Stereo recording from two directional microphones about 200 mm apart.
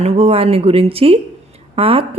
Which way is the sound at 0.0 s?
30° right (ahead or behind).